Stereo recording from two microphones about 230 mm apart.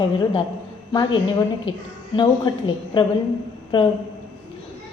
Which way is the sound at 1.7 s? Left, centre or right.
Left.